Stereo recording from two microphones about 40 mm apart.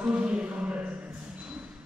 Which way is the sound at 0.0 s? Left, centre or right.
Right.